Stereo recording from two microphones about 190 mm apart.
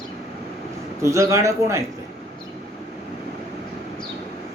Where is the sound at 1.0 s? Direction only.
15° right (ahead or behind).